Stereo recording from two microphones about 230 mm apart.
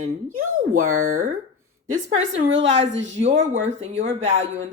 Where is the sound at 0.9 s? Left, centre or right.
Right.